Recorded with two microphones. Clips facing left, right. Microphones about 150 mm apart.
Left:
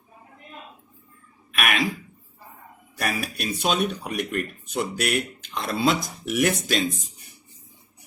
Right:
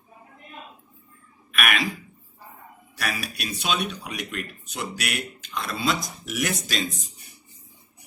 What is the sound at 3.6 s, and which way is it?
Speech, 55° left (ahead or behind).